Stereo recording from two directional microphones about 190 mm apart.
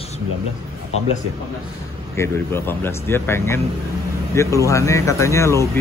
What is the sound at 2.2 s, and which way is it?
Speech, 10° left (ahead or behind).